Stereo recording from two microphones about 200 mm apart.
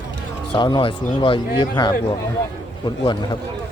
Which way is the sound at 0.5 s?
25° left (ahead or behind).